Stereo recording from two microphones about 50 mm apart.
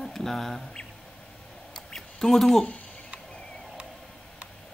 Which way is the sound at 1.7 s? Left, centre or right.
Centre.